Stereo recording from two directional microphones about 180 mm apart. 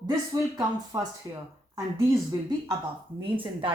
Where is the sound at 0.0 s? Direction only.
20° right (ahead or behind).